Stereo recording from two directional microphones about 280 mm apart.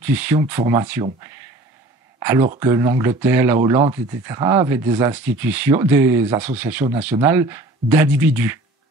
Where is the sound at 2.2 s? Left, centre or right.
Centre.